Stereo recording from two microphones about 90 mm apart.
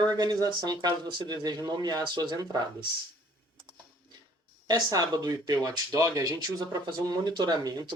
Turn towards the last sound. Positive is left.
turn(degrees=-50)  # may be behind; listen again after turning